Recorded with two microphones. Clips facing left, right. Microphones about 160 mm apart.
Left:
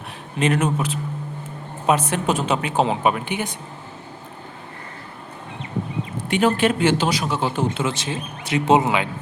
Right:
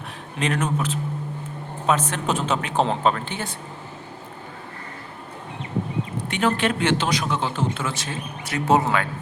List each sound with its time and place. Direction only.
0.3 s speech: 5° left (ahead or behind)
6.3 s speech: 10° left (ahead or behind)
7.7 s speech: 20° left (ahead or behind)